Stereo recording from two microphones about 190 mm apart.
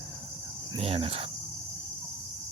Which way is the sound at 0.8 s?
30° right (ahead or behind).